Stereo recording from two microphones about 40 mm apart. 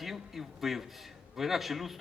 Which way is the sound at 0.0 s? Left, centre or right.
Centre.